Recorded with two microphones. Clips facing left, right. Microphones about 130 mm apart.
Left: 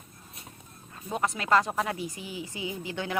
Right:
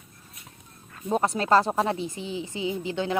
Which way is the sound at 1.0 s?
35° right (ahead or behind).